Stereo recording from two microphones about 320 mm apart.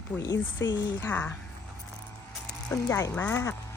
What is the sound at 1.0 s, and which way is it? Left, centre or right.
Speech, centre.